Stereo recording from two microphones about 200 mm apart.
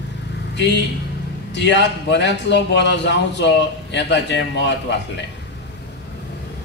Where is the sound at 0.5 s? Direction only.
60° left (ahead or behind).